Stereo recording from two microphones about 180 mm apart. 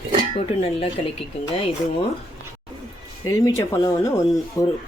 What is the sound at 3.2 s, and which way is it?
Speech, 20° left (ahead or behind).